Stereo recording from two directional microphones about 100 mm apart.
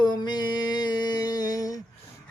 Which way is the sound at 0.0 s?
45° left (ahead or behind).